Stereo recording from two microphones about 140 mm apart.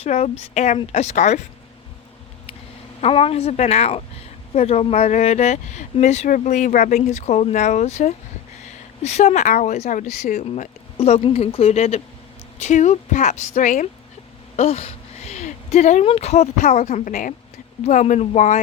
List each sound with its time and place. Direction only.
0.0 s speech: 50° left (ahead or behind)
3.0 s speech: 45° left (ahead or behind); by 10.4 s 60° left (ahead or behind)
10.4 s speech: 45° left (ahead or behind); by 13.8 s 65° left (ahead or behind)
14.5 s a sound: 45° left (ahead or behind)
16.0 s speech: 50° left (ahead or behind); by 17.3 s 70° left (ahead or behind)
17.8 s speech: 55° left (ahead or behind)